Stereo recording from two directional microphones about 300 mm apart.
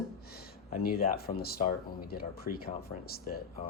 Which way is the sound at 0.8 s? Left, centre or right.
Left.